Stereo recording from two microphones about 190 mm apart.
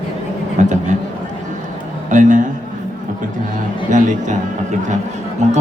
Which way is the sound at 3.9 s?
40° right (ahead or behind).